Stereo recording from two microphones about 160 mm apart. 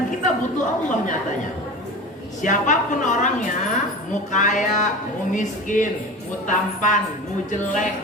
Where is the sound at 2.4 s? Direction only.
50° left (ahead or behind).